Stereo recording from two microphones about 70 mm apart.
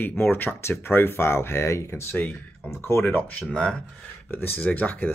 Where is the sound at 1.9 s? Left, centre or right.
Left.